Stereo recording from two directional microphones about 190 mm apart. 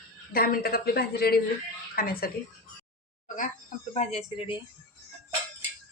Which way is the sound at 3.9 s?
35° left (ahead or behind).